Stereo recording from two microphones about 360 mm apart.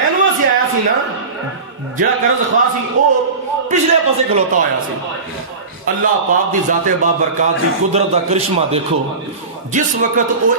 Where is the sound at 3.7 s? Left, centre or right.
Centre.